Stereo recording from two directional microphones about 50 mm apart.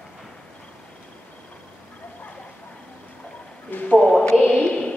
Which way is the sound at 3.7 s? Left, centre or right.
Left.